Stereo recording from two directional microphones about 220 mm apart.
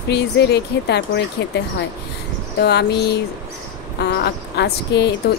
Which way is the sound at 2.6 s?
50° left (ahead or behind).